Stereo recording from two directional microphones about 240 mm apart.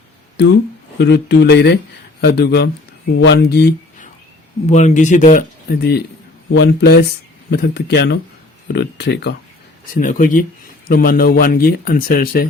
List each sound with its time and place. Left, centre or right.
0.9 s speech: left
4.6 s speech: left